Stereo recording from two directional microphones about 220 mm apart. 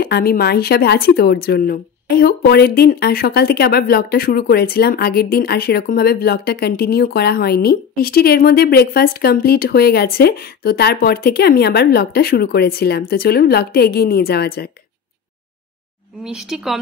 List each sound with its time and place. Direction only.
0.0 s a woman's voice: 45° left (ahead or behind)
16.3 s speech: centre (ahead or behind)